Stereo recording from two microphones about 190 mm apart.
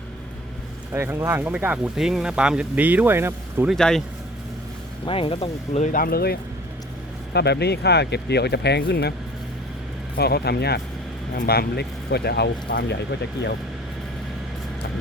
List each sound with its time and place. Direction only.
0.9 s speech: 15° right (ahead or behind)
3.8 s speech: 5° left (ahead or behind)
5.0 s speech: 30° left (ahead or behind); by 6.3 s 55° left (ahead or behind)
7.3 s speech: 60° left (ahead or behind)
10.2 s speech: 55° left (ahead or behind)